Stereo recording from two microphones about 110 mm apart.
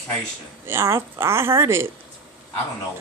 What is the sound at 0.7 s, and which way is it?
A woman's voice, 25° right (ahead or behind).